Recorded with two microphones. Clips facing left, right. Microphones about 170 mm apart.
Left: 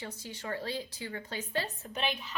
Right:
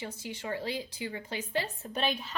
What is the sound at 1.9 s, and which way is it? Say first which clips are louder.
Speech: right 3 dB; 35° right (ahead or behind).